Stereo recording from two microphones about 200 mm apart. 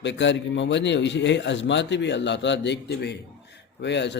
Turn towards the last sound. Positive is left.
turn(degrees=60)  # may be behind; listen again after turning